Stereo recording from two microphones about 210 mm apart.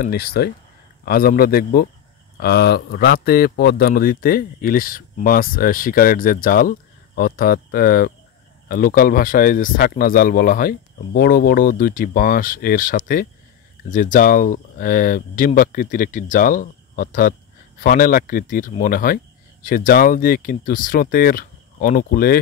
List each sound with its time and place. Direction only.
0.0 s speech: 45° left (ahead or behind)